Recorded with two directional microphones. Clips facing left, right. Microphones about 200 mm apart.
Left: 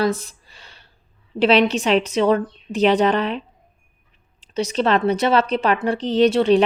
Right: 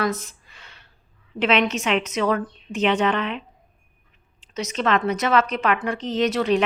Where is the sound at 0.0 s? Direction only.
30° left (ahead or behind).